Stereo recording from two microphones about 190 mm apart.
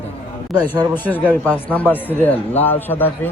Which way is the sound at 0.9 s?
10° left (ahead or behind).